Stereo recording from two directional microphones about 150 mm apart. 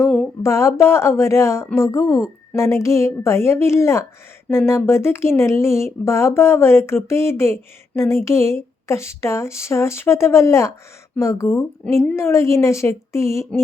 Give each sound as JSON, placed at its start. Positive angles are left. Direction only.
{"t": 0.4, "sound": "speech", "side_deg": 20}